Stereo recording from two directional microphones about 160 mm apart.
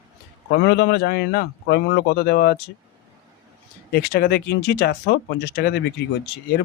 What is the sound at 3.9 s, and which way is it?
Speech, 75° left (ahead or behind).